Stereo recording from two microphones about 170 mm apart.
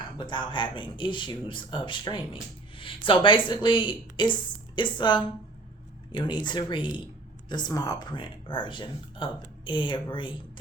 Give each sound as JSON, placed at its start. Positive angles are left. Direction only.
{"t": 0.2, "sound": "speech", "side_deg": 30}